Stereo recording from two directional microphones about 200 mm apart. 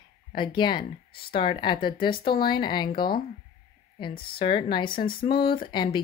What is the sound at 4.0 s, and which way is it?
Speech, 25° left (ahead or behind).